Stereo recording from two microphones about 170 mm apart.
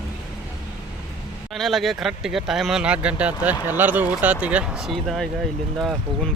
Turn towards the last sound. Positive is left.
turn(degrees=0)  # may be behind; listen again after turning